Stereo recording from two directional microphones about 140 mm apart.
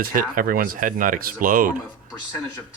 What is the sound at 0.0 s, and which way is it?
Speech, 85° right.